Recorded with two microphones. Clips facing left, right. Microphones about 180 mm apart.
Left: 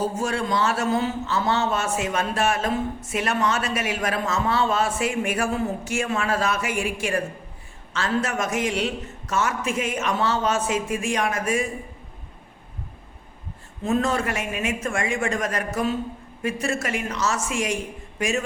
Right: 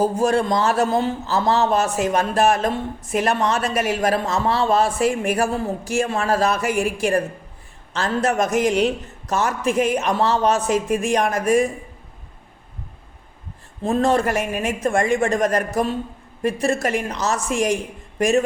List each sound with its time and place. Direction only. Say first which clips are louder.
0.2 s a man's voice: right 6 dB; 35° right (ahead or behind)
13.8 s a man's voice: right 4 dB; 35° right (ahead or behind)